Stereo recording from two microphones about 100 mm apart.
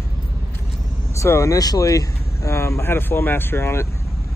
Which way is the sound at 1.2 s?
30° left (ahead or behind).